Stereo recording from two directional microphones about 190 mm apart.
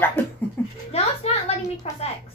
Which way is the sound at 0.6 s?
10° left (ahead or behind).